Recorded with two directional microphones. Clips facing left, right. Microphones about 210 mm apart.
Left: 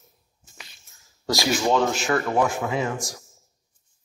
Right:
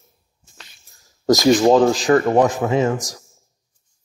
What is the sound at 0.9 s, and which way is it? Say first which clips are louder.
Speech: right 10 dB; 45° right (ahead or behind).